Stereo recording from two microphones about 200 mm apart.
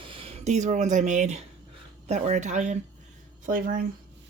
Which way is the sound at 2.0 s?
35° right (ahead or behind).